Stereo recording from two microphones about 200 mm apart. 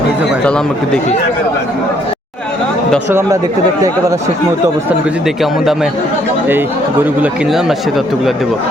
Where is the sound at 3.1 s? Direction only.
10° right (ahead or behind).